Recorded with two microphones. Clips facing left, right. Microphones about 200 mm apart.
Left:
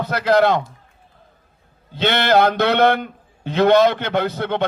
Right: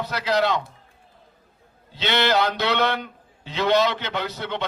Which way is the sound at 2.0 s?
55° left (ahead or behind).